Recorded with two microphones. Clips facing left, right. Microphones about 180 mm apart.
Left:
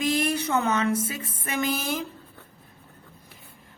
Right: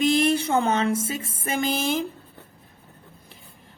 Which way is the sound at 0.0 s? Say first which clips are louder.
Right 5 dB; 25° right (ahead or behind).